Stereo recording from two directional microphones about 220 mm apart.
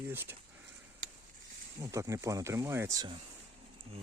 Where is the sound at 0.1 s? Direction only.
10° right (ahead or behind).